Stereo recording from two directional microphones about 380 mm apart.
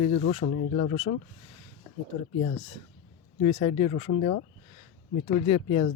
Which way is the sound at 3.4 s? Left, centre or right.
Centre.